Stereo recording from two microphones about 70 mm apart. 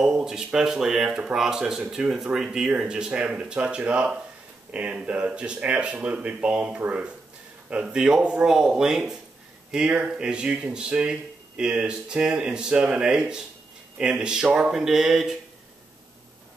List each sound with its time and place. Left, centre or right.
0.0 s speech: centre
7.8 s speech: centre